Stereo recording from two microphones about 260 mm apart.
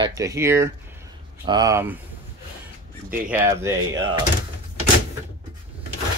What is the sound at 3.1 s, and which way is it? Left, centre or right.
Speech, centre.